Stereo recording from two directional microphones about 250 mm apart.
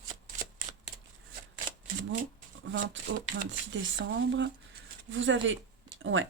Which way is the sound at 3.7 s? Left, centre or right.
Right.